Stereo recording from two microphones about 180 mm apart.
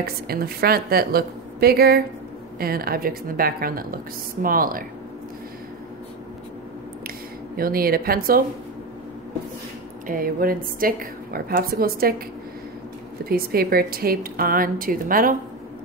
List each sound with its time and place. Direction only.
0.0 s a woman's voice: 55° right (ahead or behind)
7.5 s a woman's voice: 55° right (ahead or behind)
10.0 s a woman's voice: 50° right (ahead or behind)
13.3 s a woman's voice: 55° right (ahead or behind)